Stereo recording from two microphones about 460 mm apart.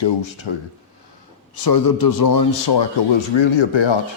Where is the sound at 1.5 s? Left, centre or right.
Left.